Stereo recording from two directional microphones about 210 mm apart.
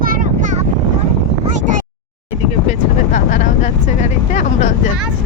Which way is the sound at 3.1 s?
35° left (ahead or behind).